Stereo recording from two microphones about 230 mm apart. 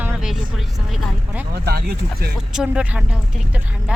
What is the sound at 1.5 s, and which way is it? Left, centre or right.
Speech, right.